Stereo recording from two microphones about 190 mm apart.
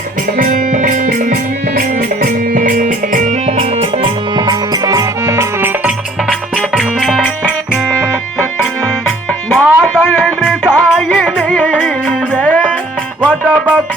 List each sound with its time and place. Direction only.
0.3 s music: 40° right (ahead or behind); by 7.8 s centre (ahead or behind)
9.0 s music: 5° left (ahead or behind)
13.2 s music: 5° right (ahead or behind)